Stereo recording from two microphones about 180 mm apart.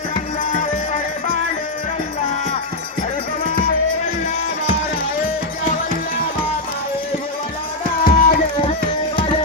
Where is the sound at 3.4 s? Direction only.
45° left (ahead or behind).